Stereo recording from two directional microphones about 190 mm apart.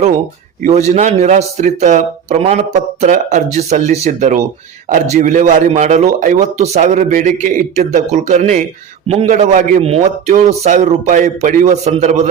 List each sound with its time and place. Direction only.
0.6 s speech: 35° right (ahead or behind)